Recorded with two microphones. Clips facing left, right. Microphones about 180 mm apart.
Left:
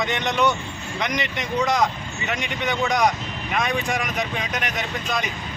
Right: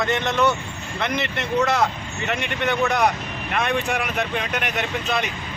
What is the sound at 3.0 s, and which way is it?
Speech, 5° right (ahead or behind).